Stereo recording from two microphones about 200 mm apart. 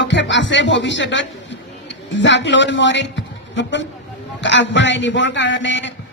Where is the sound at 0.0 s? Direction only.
65° left (ahead or behind).